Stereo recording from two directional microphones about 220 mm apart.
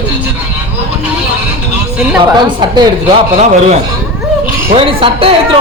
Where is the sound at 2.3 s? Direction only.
20° right (ahead or behind).